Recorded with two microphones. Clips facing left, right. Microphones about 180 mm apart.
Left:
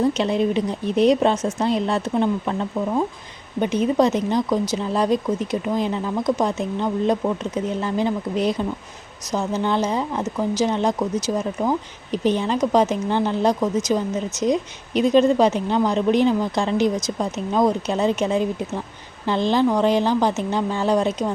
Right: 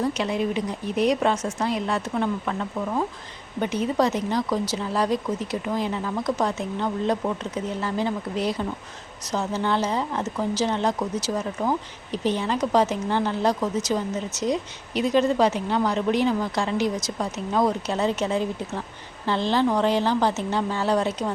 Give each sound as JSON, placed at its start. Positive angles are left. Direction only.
{"t": 0.0, "sound": "a woman's voice", "side_deg": 25}